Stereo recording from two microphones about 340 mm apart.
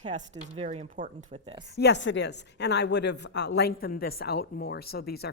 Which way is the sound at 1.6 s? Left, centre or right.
Left.